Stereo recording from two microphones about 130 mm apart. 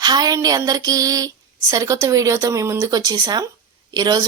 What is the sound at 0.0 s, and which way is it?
Speech, 30° right (ahead or behind).